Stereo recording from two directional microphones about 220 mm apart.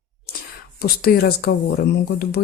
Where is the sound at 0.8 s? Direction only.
45° left (ahead or behind).